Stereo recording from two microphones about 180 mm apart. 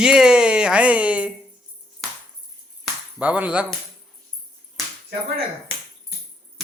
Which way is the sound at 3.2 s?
10° right (ahead or behind).